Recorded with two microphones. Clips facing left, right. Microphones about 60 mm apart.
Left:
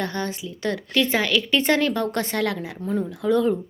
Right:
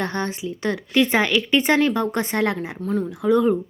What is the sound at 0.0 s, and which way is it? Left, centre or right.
Speech, right.